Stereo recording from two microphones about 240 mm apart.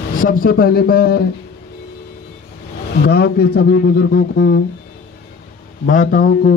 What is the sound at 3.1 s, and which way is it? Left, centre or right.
Speech, left.